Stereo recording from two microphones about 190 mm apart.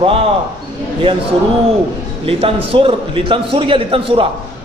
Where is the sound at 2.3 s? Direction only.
30° right (ahead or behind).